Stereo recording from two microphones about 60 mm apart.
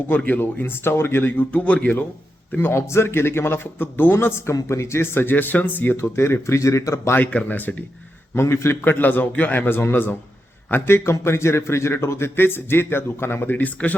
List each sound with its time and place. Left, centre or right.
0.3 s a man's voice: left
1.5 s speech: left
2.6 s a man's voice: left
7.2 s speech: left
8.4 s a man's voice: left
8.8 s a man's voice: left